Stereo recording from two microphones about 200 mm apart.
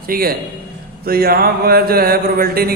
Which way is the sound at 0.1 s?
50° right (ahead or behind).